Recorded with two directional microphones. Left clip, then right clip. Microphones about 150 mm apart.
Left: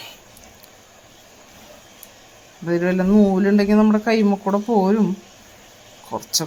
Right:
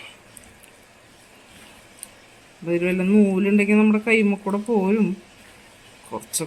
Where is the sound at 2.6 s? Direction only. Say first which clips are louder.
Left 2 dB; 15° left (ahead or behind).